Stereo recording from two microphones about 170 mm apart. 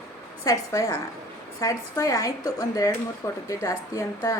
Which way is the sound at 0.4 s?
20° left (ahead or behind).